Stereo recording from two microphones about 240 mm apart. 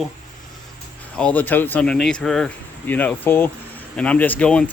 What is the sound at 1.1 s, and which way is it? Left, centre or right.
Speech, centre.